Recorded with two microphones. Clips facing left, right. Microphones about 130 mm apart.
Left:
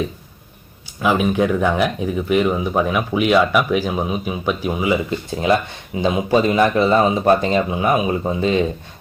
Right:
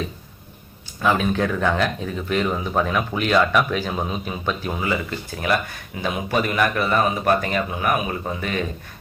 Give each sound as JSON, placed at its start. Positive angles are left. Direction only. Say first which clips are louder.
{"t": 1.0, "sound": "speech", "louder": "left 3 dB", "side_deg": 10}